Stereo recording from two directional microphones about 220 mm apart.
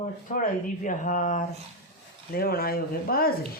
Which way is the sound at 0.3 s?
35° left (ahead or behind).